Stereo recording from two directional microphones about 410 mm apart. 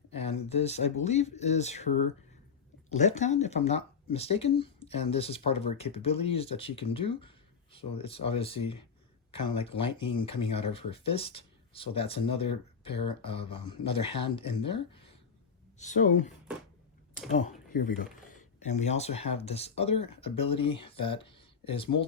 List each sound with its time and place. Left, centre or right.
0.1 s speech: centre